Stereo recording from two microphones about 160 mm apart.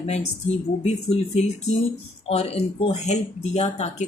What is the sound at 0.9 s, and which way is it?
A woman's voice, 45° left (ahead or behind).